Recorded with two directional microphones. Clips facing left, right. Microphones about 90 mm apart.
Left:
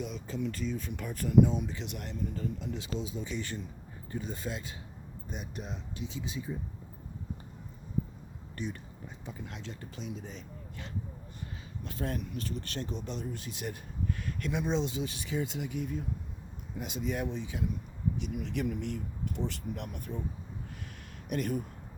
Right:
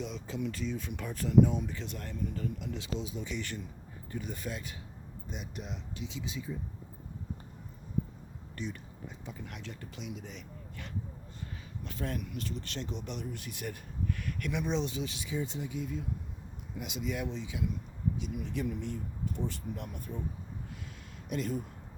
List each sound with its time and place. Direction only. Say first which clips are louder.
0.0 s speech: left 1 dB; centre (ahead or behind)
1.5 s speech: left 1 dB; 20° left (ahead or behind)
2.3 s speech: left 1 dB; 30° left (ahead or behind)
5.3 s speech: left 1 dB; 40° left (ahead or behind)
8.5 s speech: left 2 dB; 45° left (ahead or behind)
9.2 s speech: left 2 dB; 25° left (ahead or behind)
12.5 s speech: left 2 dB; 45° left (ahead or behind)
15.1 s speech: left 2 dB; 60° left (ahead or behind)
21.2 s speech: left 2 dB; 55° left (ahead or behind)